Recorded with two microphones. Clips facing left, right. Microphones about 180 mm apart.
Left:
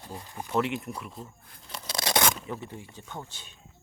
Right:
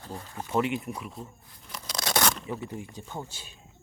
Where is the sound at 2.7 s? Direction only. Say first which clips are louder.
Right 4 dB; 15° right (ahead or behind).